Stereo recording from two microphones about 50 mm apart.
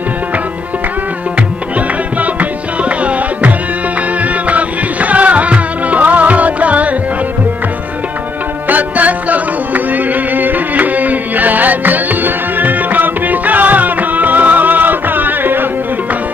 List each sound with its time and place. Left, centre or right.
2.1 s music: right
8.6 s music: right